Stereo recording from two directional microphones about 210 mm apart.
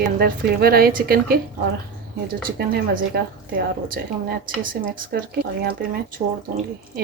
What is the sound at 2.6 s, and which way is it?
A woman's voice, 45° right (ahead or behind).